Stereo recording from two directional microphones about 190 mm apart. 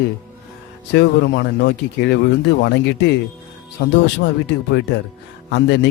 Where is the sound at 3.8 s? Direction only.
65° left (ahead or behind).